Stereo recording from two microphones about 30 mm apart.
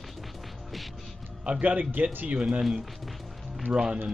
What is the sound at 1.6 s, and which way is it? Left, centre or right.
Speech, right.